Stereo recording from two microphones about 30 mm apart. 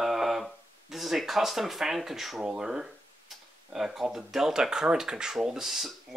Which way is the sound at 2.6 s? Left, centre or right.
Right.